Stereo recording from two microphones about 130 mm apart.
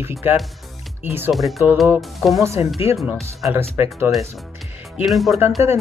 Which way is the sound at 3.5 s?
20° right (ahead or behind).